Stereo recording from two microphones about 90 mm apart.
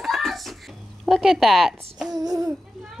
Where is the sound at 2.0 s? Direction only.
45° right (ahead or behind).